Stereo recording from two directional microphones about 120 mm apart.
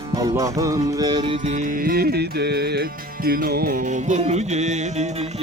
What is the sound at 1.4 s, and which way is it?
Music, 90° right.